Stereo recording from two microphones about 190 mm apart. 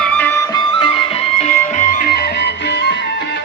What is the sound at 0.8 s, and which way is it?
Music, 30° left (ahead or behind).